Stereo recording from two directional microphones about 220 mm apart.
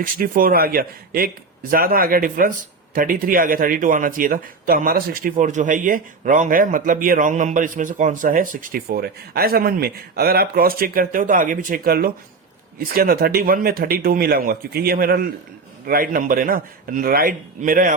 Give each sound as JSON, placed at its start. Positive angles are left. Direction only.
{"t": 0.0, "sound": "speech", "side_deg": -40}